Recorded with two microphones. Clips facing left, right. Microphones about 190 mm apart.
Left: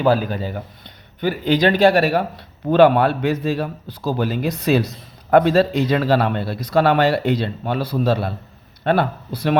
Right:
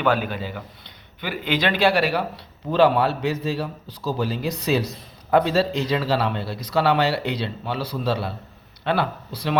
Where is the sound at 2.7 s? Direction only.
55° left (ahead or behind).